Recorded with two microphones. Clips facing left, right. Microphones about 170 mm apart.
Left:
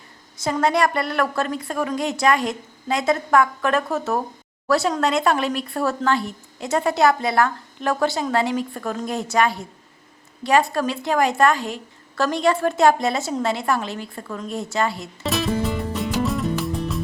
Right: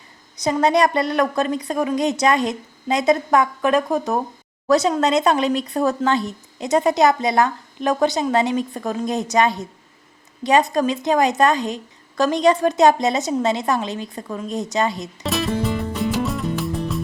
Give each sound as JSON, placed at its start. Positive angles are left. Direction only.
{"t": 0.3, "sound": "speech", "side_deg": -20}
{"t": 15.2, "sound": "music", "side_deg": 0}